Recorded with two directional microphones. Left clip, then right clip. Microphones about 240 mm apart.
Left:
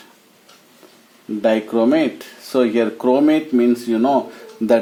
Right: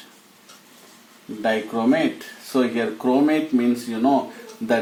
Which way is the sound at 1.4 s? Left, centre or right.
Left.